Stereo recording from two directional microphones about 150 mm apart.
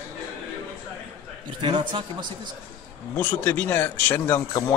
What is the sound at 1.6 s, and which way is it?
Speech, 30° right (ahead or behind).